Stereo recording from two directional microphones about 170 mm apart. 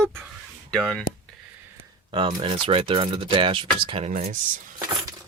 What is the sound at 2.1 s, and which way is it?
Speech, 30° right (ahead or behind).